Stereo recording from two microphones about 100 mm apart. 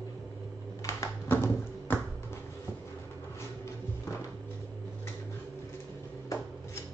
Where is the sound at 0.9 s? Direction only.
25° left (ahead or behind).